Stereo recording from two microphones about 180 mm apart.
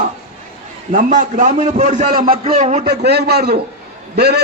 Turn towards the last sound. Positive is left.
turn(degrees=-65)  # may be behind; listen again after turning